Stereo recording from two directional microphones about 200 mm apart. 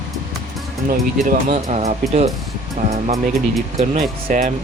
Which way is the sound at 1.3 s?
40° right (ahead or behind).